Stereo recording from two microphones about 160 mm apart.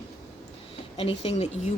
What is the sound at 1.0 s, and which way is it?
Speech, 35° left (ahead or behind).